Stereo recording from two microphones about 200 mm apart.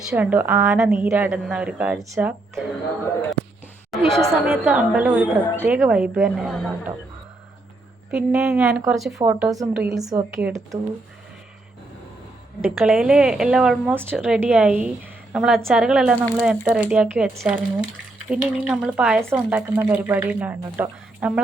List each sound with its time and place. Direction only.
0.1 s speech: 10° right (ahead or behind)
2.6 s a woman's voice: 10° left (ahead or behind)
4.4 s a woman's voice: 10° right (ahead or behind)
8.1 s a woman's voice: 5° right (ahead or behind)
10.0 s speech: 20° right (ahead or behind)
10.3 s a woman's voice: centre (ahead or behind)
12.7 s a woman's voice: centre (ahead or behind)